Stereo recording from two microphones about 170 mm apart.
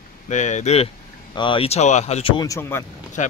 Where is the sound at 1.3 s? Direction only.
30° left (ahead or behind).